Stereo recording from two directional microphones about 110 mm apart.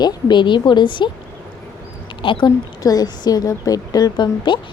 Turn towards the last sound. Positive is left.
turn(degrees=45)  # may be behind; listen again after turning